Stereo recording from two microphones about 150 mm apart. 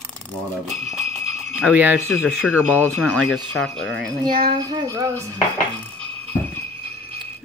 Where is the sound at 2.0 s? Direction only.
5° left (ahead or behind).